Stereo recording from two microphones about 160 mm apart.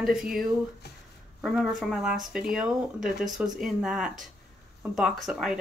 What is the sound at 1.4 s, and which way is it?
Speech, 5° right (ahead or behind).